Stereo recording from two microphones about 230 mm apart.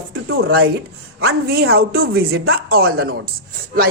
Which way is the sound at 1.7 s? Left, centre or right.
Right.